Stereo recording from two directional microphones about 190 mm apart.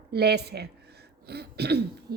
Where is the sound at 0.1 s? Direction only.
60° right (ahead or behind).